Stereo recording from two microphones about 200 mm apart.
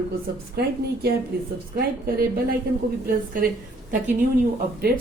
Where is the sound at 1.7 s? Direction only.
50° right (ahead or behind).